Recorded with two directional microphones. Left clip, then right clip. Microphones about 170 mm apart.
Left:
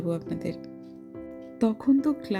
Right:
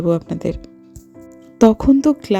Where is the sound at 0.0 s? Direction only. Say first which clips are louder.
Right 12 dB; 40° right (ahead or behind).